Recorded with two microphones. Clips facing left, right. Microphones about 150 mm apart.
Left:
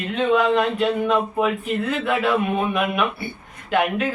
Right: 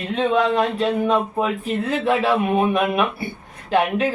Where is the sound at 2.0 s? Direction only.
30° right (ahead or behind).